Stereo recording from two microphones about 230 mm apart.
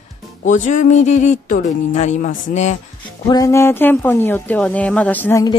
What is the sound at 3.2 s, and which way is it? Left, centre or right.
Speech, centre.